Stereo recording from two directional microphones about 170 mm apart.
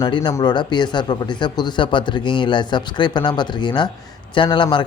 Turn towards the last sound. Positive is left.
turn(degrees=30)  # may be behind; listen again after turning